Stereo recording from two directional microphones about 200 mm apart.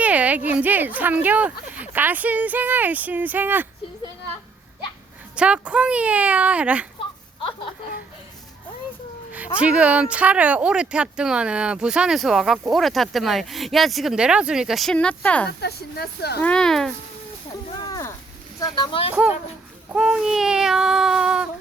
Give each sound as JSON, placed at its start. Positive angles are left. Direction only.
{"t": 0.0, "sound": "speech", "side_deg": -5}
{"t": 5.4, "sound": "speech", "side_deg": -5}
{"t": 9.6, "sound": "speech", "side_deg": -5}
{"t": 15.6, "sound": "speech", "side_deg": 55}
{"t": 16.4, "sound": "speech", "side_deg": 5}
{"t": 17.7, "sound": "a sound", "side_deg": 20}
{"t": 18.6, "sound": "speech", "side_deg": 20}
{"t": 19.1, "sound": "speech", "side_deg": -5}